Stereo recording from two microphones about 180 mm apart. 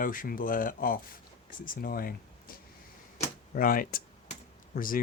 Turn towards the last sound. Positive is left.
turn(degrees=50)  # may be behind; listen again after turning